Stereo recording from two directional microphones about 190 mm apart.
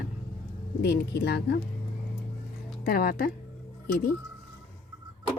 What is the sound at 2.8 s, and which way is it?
Speech, 50° left (ahead or behind).